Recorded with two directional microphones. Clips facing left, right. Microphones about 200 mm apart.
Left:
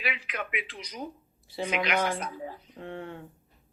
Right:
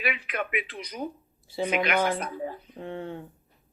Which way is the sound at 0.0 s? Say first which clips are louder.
Right 4 dB; 55° right (ahead or behind).